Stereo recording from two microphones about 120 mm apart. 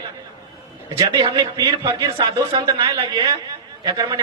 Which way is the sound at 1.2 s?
30° right (ahead or behind).